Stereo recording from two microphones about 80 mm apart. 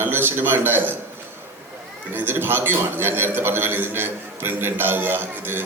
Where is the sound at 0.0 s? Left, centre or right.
Right.